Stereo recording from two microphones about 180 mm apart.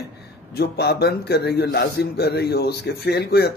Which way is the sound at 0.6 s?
65° left (ahead or behind).